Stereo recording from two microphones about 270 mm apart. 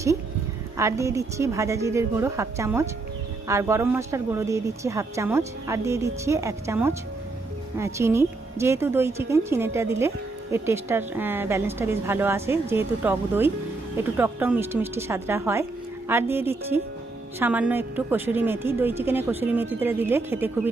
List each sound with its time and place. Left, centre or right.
0.8 s a woman's voice: centre